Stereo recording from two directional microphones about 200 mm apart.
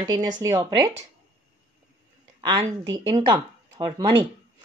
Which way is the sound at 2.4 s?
20° right (ahead or behind).